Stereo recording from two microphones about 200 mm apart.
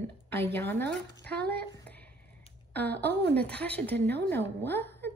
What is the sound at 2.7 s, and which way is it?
Speech, 10° left (ahead or behind).